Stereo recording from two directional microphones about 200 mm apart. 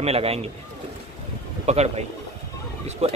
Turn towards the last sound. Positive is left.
turn(degrees=-30)  # may be behind; listen again after turning